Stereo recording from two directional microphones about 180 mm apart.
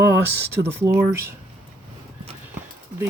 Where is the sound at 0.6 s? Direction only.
15° right (ahead or behind).